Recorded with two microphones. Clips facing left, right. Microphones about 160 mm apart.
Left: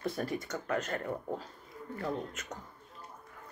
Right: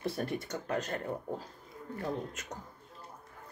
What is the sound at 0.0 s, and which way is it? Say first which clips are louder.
Speech: even; 25° right (ahead or behind).